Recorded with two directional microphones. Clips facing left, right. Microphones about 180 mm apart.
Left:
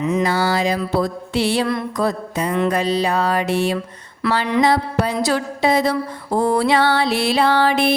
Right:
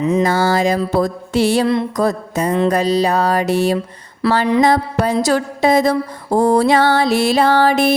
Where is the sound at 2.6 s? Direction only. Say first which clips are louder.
Right 3 dB; 40° right (ahead or behind).